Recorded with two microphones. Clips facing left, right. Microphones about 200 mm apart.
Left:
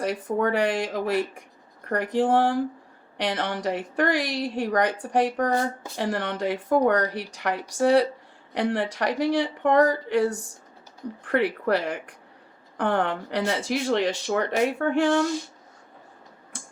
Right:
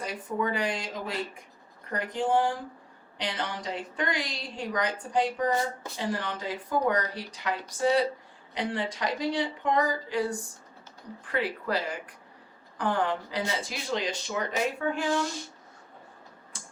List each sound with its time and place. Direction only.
0.0 s a woman's voice: 65° left (ahead or behind)